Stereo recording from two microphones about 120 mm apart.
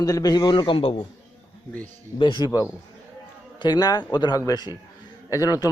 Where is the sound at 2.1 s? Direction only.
40° left (ahead or behind).